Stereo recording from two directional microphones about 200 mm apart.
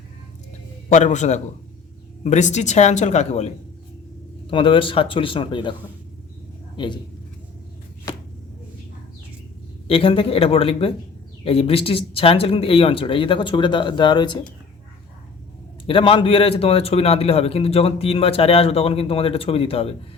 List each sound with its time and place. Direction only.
0.9 s speech: 35° left (ahead or behind)
4.5 s a man's voice: 25° left (ahead or behind)
6.7 s speech: 20° left (ahead or behind)
9.8 s a man's voice: 25° left (ahead or behind)
15.9 s a man's voice: 25° left (ahead or behind)